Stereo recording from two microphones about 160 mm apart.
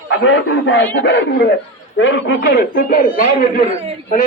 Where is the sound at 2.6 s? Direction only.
60° left (ahead or behind).